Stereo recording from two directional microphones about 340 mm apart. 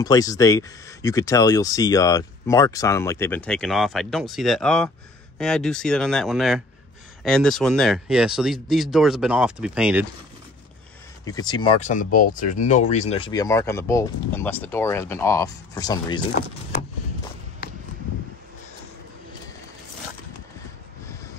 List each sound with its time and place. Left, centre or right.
0.0 s speech: centre
11.2 s speech: centre
17.6 s a sound: left